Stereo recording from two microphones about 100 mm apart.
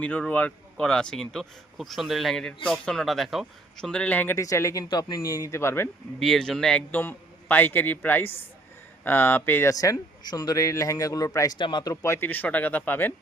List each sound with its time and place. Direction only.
0.0 s speech: 15° left (ahead or behind)
4.4 s a man's voice: 30° left (ahead or behind)
6.1 s speech: centre (ahead or behind)
7.0 s a man's voice: 20° left (ahead or behind)
9.6 s a man's voice: 35° left (ahead or behind)
12.0 s speech: 25° left (ahead or behind)